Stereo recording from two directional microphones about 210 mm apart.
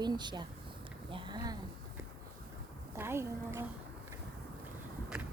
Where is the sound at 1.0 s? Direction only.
25° right (ahead or behind).